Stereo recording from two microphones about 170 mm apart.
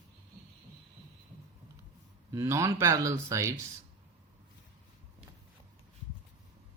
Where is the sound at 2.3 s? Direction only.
20° right (ahead or behind).